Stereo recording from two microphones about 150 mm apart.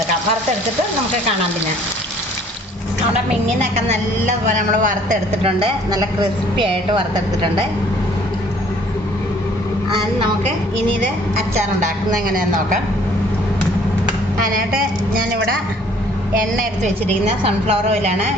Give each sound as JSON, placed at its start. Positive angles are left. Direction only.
{"t": 3.8, "sound": "a man's voice", "side_deg": -55}
{"t": 5.4, "sound": "a woman's voice", "side_deg": -40}
{"t": 12.3, "sound": "a woman's voice", "side_deg": -65}
{"t": 17.4, "sound": "a woman's voice", "side_deg": -40}